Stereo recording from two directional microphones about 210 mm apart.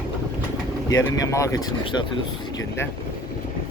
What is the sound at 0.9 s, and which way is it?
Speech, 15° left (ahead or behind).